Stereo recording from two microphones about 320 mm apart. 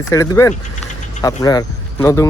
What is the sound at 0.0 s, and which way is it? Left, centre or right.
Speech, centre.